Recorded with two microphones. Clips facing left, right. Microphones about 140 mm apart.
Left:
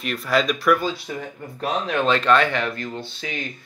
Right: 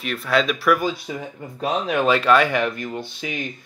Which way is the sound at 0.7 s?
15° right (ahead or behind).